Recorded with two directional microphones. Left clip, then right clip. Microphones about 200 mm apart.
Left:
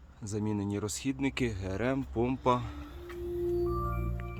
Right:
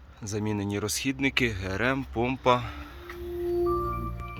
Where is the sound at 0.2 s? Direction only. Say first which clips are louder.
Right 4 dB; 5° right (ahead or behind).